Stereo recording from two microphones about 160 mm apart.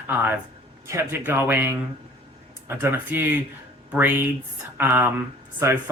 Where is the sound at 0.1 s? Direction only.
10° right (ahead or behind).